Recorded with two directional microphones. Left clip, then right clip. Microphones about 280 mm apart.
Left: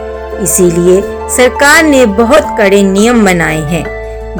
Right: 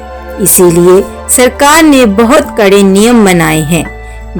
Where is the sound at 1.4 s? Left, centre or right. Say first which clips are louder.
Right 1 dB; right.